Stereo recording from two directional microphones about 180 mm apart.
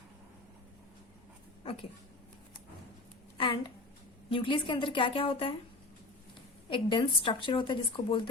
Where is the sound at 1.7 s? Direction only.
30° left (ahead or behind).